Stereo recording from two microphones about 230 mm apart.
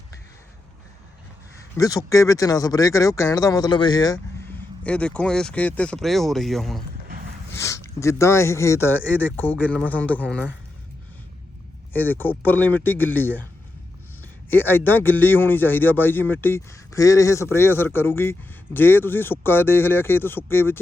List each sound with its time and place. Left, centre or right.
1.7 s speech: centre
7.5 s speech: centre
11.9 s speech: centre
14.5 s speech: centre